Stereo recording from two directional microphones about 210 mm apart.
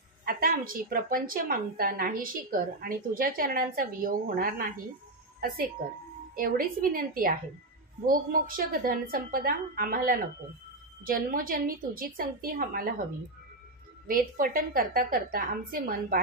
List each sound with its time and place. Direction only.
0.2 s a woman's voice: 45° right (ahead or behind)
6.3 s a woman's voice: 40° right (ahead or behind)
14.0 s a woman's voice: 40° right (ahead or behind)